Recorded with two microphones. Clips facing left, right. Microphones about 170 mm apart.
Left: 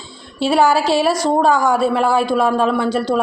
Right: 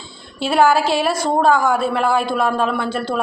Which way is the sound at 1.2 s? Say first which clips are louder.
Left 1 dB; 5° right (ahead or behind).